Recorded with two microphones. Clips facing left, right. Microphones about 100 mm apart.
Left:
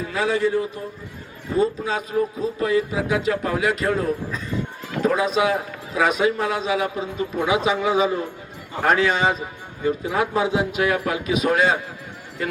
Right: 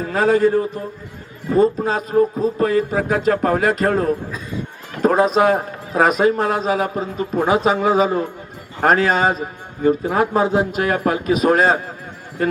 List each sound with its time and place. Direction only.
0.0 s a man's voice: 45° right (ahead or behind)